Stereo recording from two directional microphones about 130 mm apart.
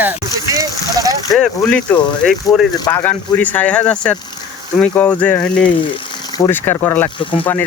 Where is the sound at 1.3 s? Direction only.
Centre (ahead or behind).